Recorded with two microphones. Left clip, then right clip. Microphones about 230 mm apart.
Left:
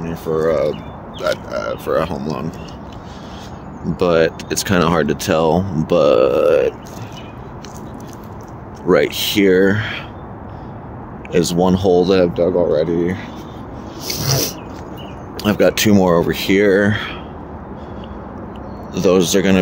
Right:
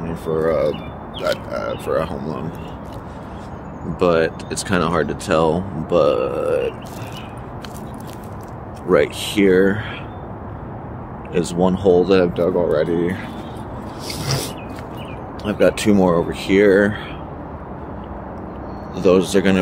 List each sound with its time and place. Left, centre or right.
0.0 s speech: centre
3.9 s speech: left
8.8 s speech: left
11.3 s speech: left
14.0 s a sound: left
15.4 s speech: left
18.9 s speech: left